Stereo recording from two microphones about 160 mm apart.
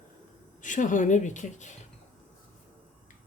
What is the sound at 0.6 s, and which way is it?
A woman's voice, 55° left (ahead or behind).